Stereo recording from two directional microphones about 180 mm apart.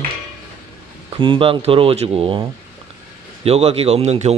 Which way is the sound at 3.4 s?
35° right (ahead or behind).